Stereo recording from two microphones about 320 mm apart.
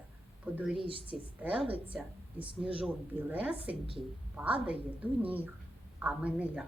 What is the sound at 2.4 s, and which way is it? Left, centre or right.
Speech, centre.